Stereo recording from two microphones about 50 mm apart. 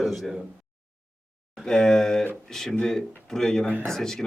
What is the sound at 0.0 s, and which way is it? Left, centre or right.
Speech, centre.